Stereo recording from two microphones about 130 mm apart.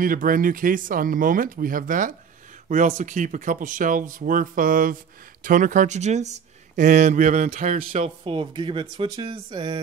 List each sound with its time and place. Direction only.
0.0 s speech: 90° right
2.7 s speech: 75° right (ahead or behind)
7.4 s speech: 60° right (ahead or behind)
8.3 s speech: 45° right (ahead or behind)